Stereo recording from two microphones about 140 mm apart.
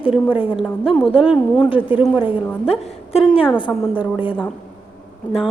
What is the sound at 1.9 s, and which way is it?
Speech, 40° left (ahead or behind).